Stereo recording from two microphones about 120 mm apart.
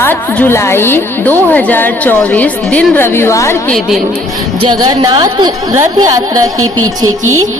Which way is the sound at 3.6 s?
5° left (ahead or behind).